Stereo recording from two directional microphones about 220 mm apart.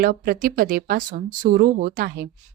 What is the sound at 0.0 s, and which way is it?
A woman's voice, 40° right (ahead or behind).